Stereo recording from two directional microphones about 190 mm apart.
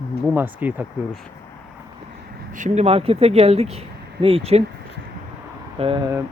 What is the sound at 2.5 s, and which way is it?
Speech, 40° right (ahead or behind).